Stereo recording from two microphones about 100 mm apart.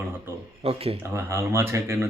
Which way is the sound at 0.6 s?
75° right (ahead or behind).